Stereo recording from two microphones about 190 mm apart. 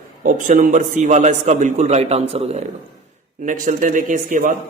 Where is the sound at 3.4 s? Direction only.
45° right (ahead or behind).